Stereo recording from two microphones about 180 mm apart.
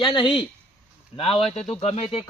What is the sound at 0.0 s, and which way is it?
Speech, 30° left (ahead or behind).